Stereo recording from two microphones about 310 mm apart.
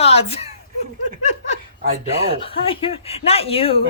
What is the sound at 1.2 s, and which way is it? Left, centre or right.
Laughter, left.